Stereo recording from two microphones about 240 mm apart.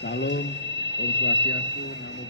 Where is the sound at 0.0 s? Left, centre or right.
Left.